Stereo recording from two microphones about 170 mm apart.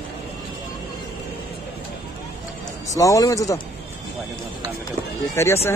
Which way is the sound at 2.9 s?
20° left (ahead or behind).